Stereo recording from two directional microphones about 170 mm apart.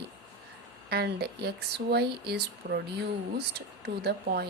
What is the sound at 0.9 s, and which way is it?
Speech, 70° right (ahead or behind).